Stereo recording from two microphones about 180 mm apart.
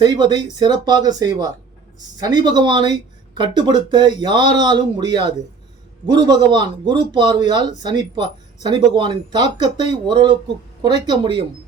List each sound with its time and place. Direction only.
0.0 s speech: 25° right (ahead or behind)